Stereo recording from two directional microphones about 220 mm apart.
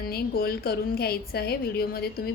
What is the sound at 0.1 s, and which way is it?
A woman's voice, 45° left (ahead or behind).